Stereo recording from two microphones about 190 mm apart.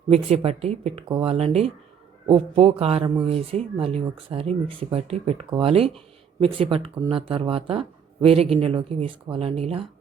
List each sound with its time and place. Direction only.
0.1 s speech: 30° right (ahead or behind)